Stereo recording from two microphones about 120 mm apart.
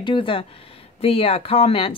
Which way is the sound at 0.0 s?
45° left (ahead or behind).